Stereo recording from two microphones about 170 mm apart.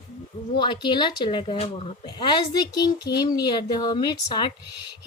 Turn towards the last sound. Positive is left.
turn(degrees=25)  # may be behind; listen again after turning